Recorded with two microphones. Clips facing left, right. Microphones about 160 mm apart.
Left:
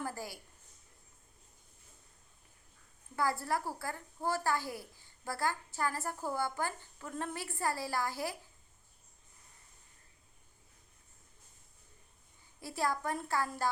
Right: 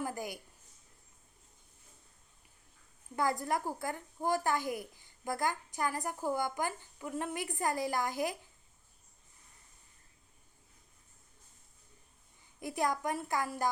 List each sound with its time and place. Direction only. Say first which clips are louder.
0.0 s a sound: right 3 dB; 15° right (ahead or behind)
3.2 s a woman's voice: right 1 dB; 20° right (ahead or behind)
12.5 s a woman's voice: right 2 dB; 15° right (ahead or behind)